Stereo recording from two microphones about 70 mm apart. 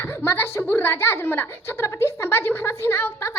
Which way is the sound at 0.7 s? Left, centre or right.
Left.